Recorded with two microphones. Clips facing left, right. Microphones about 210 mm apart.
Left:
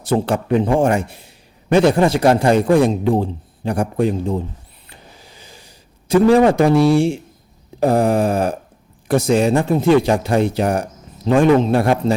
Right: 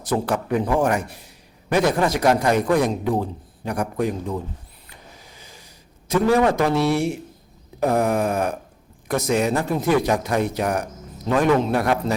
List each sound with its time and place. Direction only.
0.0 s a man's voice: 30° left (ahead or behind)
4.9 s a sound: 30° left (ahead or behind)
9.0 s a man's voice: 30° left (ahead or behind)